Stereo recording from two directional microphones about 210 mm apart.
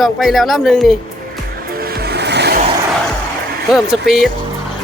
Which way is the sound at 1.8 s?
50° right (ahead or behind).